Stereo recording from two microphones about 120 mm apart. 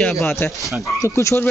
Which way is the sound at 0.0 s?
10° left (ahead or behind).